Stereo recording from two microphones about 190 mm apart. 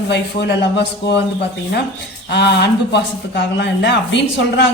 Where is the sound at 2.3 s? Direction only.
60° left (ahead or behind).